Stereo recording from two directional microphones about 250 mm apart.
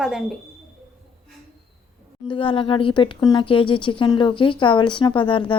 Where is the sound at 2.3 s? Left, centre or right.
Centre.